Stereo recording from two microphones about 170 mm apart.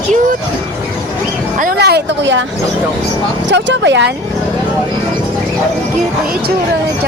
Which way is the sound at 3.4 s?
90° right.